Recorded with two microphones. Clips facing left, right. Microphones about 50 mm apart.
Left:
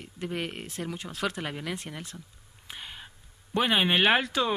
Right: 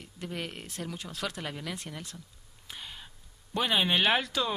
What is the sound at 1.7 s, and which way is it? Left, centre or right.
Speech, centre.